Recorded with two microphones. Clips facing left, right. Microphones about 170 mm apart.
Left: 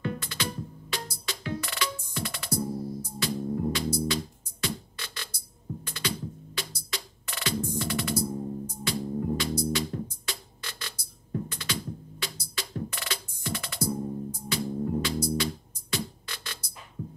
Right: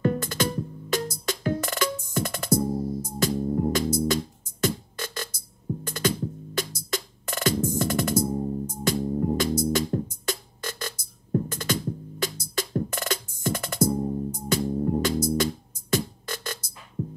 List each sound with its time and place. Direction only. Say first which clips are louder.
0.0 s music: right 8 dB; 45° right (ahead or behind)